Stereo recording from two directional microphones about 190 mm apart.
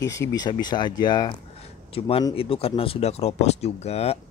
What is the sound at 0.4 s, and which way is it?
Speech, 20° left (ahead or behind).